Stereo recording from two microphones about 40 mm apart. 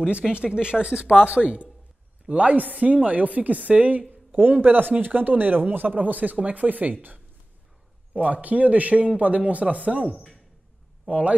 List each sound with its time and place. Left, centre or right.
0.3 s speech: right
4.4 s speech: right
11.1 s speech: right